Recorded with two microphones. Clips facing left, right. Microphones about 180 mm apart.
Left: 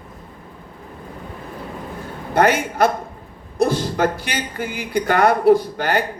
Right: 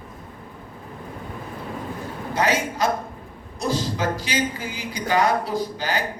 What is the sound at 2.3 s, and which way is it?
A man's voice, 55° left (ahead or behind).